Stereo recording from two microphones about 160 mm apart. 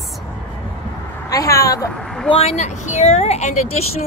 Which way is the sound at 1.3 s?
20° left (ahead or behind).